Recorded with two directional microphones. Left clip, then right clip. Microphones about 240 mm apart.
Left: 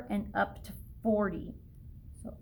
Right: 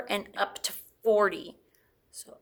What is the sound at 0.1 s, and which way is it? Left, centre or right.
A woman's voice, right.